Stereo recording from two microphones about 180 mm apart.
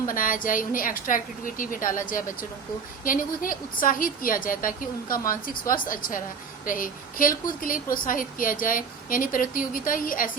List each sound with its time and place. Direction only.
0.1 s a woman's voice: 50° left (ahead or behind)